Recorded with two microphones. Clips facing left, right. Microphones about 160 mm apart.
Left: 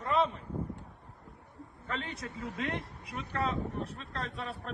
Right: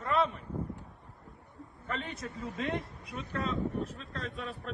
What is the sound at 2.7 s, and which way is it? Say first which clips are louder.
Vehicle: right 2 dB; centre (ahead or behind).